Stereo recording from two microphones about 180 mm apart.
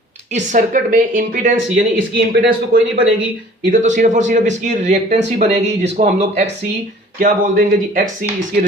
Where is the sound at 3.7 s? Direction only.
45° right (ahead or behind).